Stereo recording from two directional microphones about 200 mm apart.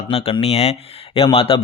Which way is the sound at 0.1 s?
30° left (ahead or behind).